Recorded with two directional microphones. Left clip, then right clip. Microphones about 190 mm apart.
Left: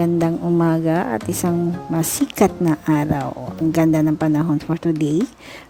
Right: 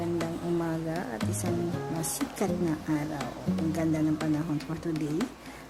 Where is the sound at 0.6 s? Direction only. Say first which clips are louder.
Left 14 dB; 45° left (ahead or behind).